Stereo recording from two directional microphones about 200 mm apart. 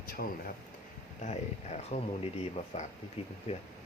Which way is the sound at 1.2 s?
35° left (ahead or behind).